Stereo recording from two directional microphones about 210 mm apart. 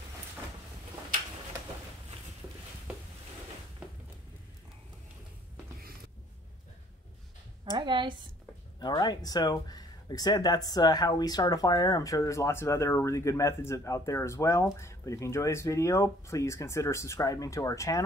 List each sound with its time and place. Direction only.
7.7 s a woman's voice: 20° right (ahead or behind)
8.7 s speech: 20° left (ahead or behind)